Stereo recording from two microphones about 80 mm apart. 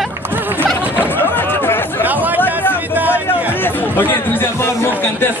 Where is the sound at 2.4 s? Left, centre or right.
Left.